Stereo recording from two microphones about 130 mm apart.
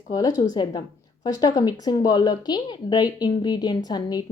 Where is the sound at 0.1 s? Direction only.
25° left (ahead or behind).